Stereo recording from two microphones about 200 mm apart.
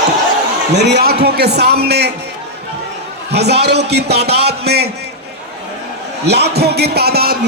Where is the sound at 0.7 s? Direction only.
60° right (ahead or behind).